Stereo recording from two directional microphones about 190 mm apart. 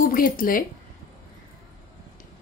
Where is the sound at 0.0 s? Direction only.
50° left (ahead or behind).